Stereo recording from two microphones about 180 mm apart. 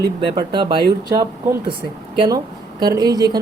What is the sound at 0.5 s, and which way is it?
Speech, 25° right (ahead or behind).